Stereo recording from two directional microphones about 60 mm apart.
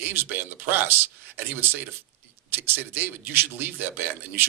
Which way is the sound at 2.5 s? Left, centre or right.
Right.